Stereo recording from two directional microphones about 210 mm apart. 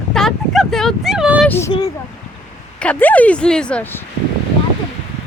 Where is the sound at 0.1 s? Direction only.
Centre (ahead or behind).